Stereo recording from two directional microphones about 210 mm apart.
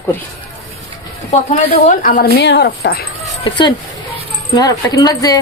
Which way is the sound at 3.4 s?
20° left (ahead or behind).